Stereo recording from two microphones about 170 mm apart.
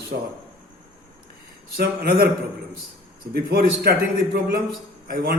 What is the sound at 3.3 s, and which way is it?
A man's voice, 70° right (ahead or behind).